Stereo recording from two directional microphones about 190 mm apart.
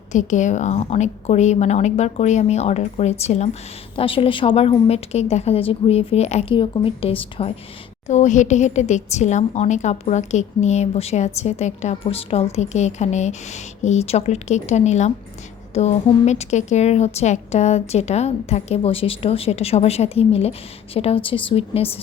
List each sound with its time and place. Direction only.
0.1 s a woman's voice: 40° left (ahead or behind)